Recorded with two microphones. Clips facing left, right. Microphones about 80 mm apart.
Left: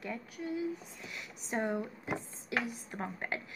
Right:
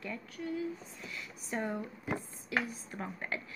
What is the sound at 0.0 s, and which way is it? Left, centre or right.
A woman's voice, left.